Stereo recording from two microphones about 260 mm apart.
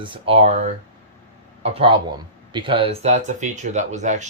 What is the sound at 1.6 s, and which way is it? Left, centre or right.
Speech, right.